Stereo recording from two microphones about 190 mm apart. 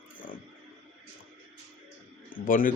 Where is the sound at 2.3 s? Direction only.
45° left (ahead or behind).